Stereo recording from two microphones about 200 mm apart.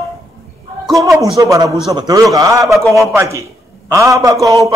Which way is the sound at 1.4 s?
15° right (ahead or behind).